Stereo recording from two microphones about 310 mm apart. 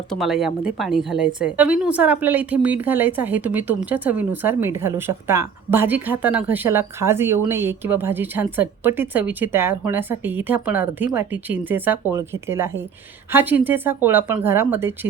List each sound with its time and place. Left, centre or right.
0.1 s a woman's voice: centre